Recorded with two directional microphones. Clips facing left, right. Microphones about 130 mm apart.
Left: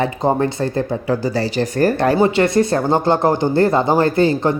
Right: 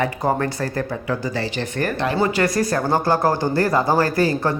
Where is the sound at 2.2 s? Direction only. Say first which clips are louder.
Left 3 dB; 25° left (ahead or behind).